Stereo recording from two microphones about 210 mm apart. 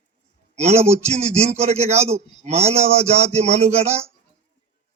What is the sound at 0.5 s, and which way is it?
A man's voice, 30° right (ahead or behind).